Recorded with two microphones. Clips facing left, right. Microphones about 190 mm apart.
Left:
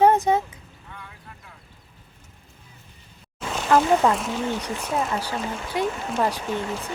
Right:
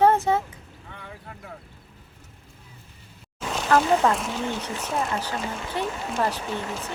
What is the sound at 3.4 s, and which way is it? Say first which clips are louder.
Speech: left 1 dB; centre (ahead or behind).